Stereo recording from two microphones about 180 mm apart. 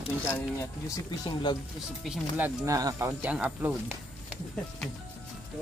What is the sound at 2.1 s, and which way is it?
Speech, 10° right (ahead or behind).